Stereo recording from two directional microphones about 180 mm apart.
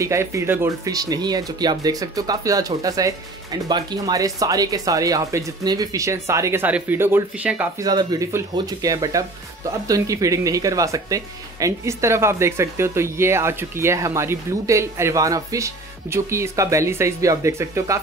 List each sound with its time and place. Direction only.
0.0 s speech: 15° right (ahead or behind)
7.8 s speech: 20° right (ahead or behind)